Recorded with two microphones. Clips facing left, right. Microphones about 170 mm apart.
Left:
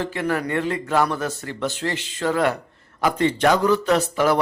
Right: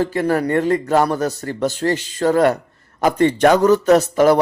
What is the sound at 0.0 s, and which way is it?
Speech, 40° right (ahead or behind).